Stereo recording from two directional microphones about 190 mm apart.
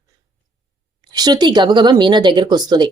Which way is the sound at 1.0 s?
20° right (ahead or behind).